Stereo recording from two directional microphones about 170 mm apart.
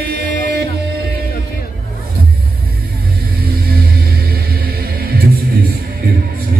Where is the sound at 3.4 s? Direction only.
60° right (ahead or behind).